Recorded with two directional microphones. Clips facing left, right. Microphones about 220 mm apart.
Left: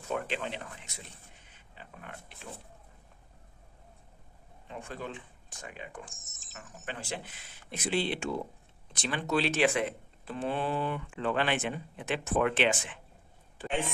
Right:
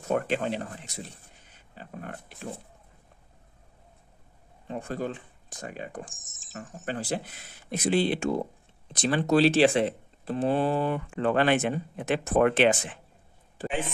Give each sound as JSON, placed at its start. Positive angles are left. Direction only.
{"t": 0.1, "sound": "speech", "side_deg": -45}
{"t": 4.6, "sound": "speech", "side_deg": -40}
{"t": 13.7, "sound": "speech", "side_deg": 0}